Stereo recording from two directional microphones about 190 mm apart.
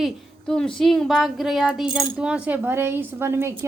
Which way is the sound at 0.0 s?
5° left (ahead or behind).